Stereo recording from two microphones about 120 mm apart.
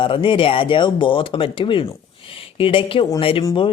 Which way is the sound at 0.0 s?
45° left (ahead or behind).